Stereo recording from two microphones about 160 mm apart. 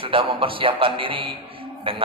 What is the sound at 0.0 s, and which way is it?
A man's voice, 35° right (ahead or behind).